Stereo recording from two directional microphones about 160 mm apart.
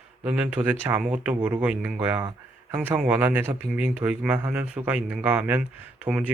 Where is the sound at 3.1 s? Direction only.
10° right (ahead or behind).